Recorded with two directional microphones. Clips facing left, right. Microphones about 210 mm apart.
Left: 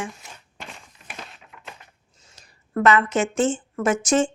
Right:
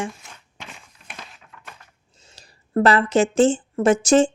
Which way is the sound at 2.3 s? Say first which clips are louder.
Right 4 dB; 35° right (ahead or behind).